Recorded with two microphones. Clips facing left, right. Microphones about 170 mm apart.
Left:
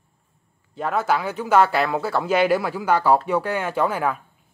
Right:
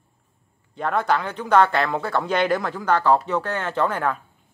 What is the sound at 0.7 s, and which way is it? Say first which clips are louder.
Speech: even; 5° left (ahead or behind).